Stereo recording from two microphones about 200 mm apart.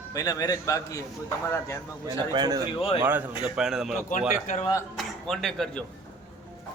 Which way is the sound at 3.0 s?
10° right (ahead or behind).